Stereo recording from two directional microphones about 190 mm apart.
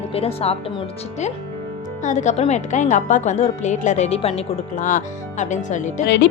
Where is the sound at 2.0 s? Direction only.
40° left (ahead or behind).